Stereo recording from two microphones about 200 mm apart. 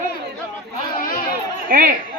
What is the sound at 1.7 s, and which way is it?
Speech, 45° right (ahead or behind).